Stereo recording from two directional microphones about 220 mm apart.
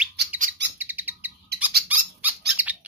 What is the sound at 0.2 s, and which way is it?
Bird, 50° right (ahead or behind).